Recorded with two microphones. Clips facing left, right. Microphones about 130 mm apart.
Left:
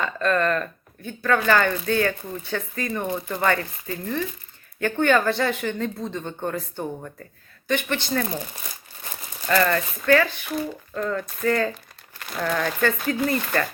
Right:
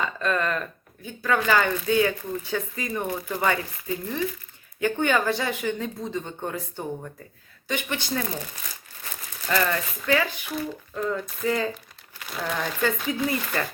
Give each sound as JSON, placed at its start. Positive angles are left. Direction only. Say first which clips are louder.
{"t": 0.0, "sound": "speech", "louder": "left 3 dB", "side_deg": -10}
{"t": 9.5, "sound": "speech", "louder": "left 4 dB", "side_deg": -10}
{"t": 11.7, "sound": "speech", "louder": "right 1 dB", "side_deg": 0}
{"t": 13.1, "sound": "speech", "louder": "left 3 dB", "side_deg": 50}